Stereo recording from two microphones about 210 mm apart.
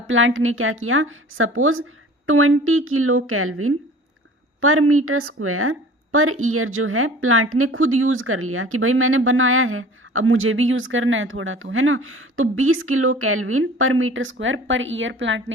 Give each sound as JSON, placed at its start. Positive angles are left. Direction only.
{"t": 0.1, "sound": "a woman's voice", "side_deg": -65}